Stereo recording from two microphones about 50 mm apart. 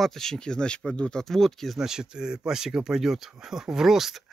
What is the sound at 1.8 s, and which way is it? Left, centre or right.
Speech, centre.